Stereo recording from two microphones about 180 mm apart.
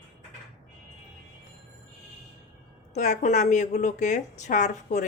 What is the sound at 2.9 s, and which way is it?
A woman's voice, 40° left (ahead or behind).